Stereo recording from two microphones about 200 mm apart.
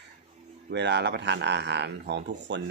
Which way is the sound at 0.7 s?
60° right (ahead or behind).